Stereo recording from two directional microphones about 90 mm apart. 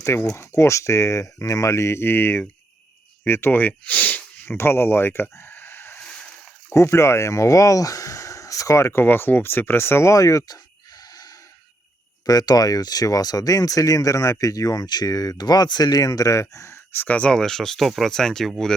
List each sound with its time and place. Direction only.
0.0 s speech: 30° left (ahead or behind)
6.1 s water: 10° left (ahead or behind)
6.7 s speech: 30° left (ahead or behind); by 18.7 s 5° left (ahead or behind)